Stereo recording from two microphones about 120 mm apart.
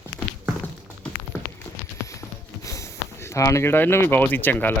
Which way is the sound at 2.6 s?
25° left (ahead or behind).